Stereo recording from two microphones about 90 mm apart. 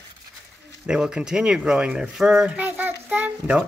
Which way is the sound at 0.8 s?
10° right (ahead or behind).